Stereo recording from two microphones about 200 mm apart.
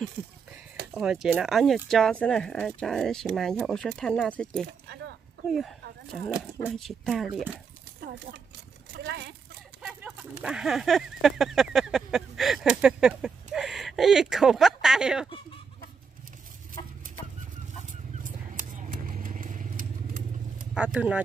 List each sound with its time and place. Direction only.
0.9 s speech: centre (ahead or behind)
4.8 s a sound: 60° right (ahead or behind)
5.5 s speech: centre (ahead or behind)
8.0 s a sound: 50° right (ahead or behind)
8.9 s speech: 55° right (ahead or behind)
9.8 s speech: 5° right (ahead or behind)
18.2 s vehicle: 40° right (ahead or behind)
20.7 s speech: 5° right (ahead or behind)